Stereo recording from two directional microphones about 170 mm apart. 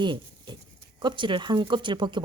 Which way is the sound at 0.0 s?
25° right (ahead or behind).